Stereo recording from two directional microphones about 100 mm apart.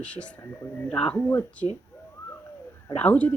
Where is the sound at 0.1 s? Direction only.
10° left (ahead or behind).